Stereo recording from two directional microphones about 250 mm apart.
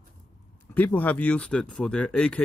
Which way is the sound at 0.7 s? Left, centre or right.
Centre.